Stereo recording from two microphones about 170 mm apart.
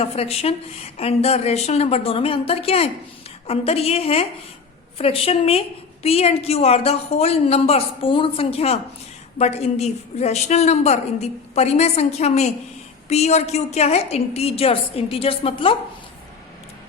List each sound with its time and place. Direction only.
0.0 s a woman's voice: 35° left (ahead or behind)